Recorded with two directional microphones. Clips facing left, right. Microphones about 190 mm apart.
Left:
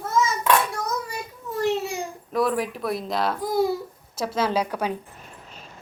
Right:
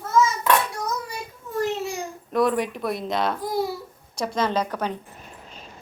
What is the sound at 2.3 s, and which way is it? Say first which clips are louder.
A child's voice: right 2 dB; centre (ahead or behind).